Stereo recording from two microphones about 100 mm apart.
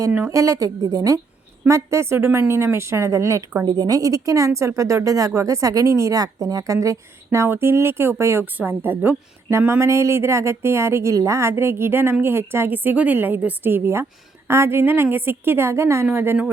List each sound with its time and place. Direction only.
0.3 s speech: 30° right (ahead or behind)